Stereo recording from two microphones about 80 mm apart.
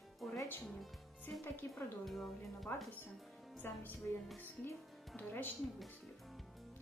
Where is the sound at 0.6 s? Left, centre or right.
Centre.